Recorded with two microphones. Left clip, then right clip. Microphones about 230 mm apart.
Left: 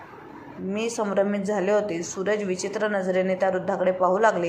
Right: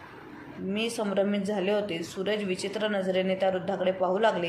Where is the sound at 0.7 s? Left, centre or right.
Centre.